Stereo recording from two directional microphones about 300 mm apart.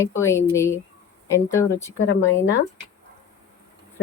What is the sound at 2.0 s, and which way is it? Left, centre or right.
Speech, left.